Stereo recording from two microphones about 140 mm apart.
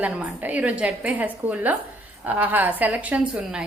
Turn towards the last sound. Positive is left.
turn(degrees=-10)  # may be behind; listen again after turning